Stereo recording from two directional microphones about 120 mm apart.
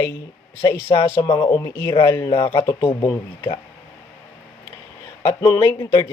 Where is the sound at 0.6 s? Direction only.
25° left (ahead or behind).